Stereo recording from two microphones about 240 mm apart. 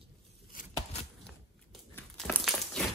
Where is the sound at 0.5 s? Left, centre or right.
Left.